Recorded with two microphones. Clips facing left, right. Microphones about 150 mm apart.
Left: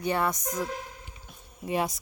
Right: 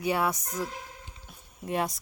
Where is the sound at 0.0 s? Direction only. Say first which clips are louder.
Even; 5° right (ahead or behind).